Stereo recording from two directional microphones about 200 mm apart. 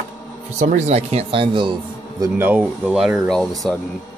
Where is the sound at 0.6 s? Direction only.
35° right (ahead or behind).